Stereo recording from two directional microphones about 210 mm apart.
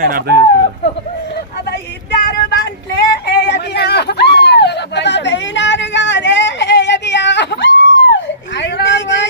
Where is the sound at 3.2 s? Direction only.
55° left (ahead or behind).